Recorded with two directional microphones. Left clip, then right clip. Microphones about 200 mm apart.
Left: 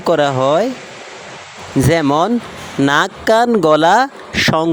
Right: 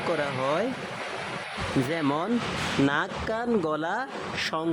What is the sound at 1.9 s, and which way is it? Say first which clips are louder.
Speech: left 17 dB; 40° left (ahead or behind).